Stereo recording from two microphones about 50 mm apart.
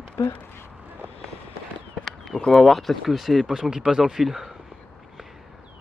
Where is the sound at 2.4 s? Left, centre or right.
Centre.